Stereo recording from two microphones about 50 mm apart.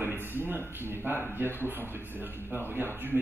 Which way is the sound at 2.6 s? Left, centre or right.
Right.